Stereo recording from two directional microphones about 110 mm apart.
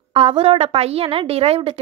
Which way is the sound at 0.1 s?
60° right (ahead or behind).